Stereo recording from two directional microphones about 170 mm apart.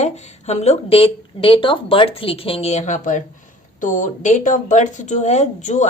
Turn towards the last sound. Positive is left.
turn(degrees=45)  # may be behind; listen again after turning